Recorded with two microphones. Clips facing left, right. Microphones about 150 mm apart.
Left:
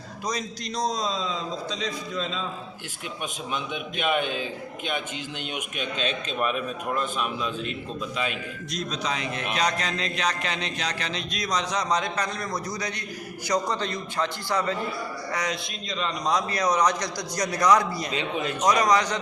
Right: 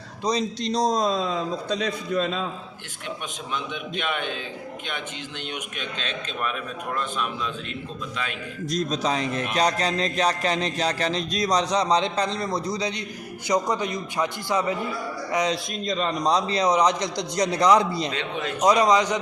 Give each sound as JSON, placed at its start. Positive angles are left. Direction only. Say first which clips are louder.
{"t": 0.3, "sound": "a man's voice", "louder": "right 7 dB", "side_deg": -30}
{"t": 3.5, "sound": "a man's voice", "louder": "right 3 dB", "side_deg": 10}
{"t": 5.5, "sound": "a man's voice", "louder": "left 3 dB", "side_deg": 10}
{"t": 8.7, "sound": "a sound", "louder": "right 6 dB", "side_deg": -40}
{"t": 13.5, "sound": "a man's voice", "louder": "right 3 dB", "side_deg": -15}
{"t": 15.9, "sound": "a man's voice", "louder": "right 4 dB", "side_deg": -45}
{"t": 16.3, "sound": "a man's voice", "louder": "right 2 dB", "side_deg": -25}
{"t": 18.1, "sound": "a man's voice", "louder": "left 1 dB", "side_deg": 10}
{"t": 18.6, "sound": "a man's voice", "louder": "right 3 dB", "side_deg": -25}